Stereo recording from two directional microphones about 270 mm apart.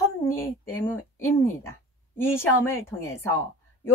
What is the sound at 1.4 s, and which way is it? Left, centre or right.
Speech, centre.